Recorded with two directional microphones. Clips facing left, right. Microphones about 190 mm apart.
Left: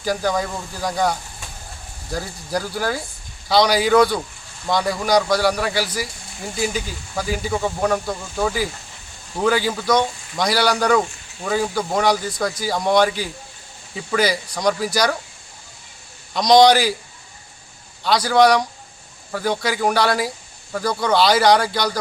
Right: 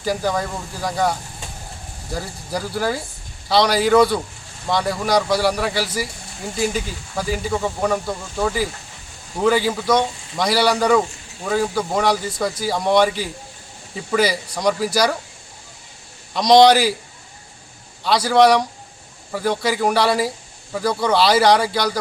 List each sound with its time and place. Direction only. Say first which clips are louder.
0.0 s speech: even; centre (ahead or behind)
2.1 s speech: left 2 dB; 5° right (ahead or behind)
16.3 s speech: right 1 dB; 5° right (ahead or behind)
18.0 s speech: right 1 dB; centre (ahead or behind)